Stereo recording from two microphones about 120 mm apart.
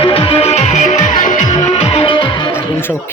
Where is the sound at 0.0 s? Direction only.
50° left (ahead or behind).